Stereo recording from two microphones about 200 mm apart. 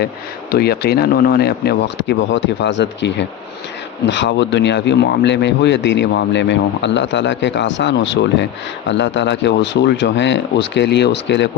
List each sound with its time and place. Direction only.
0.5 s speech: 50° left (ahead or behind)